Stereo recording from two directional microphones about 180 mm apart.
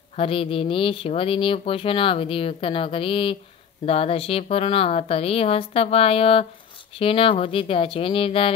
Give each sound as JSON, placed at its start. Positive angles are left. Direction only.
{"t": 0.1, "sound": "speech", "side_deg": 30}